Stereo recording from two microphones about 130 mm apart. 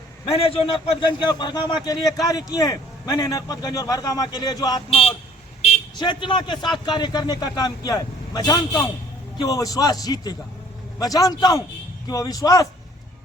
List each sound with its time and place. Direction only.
0.3 s a man's voice: 50° left (ahead or behind)
1.2 s speech: 35° left (ahead or behind)
4.9 s a man's voice: 45° left (ahead or behind)
6.0 s a man's voice: 35° left (ahead or behind)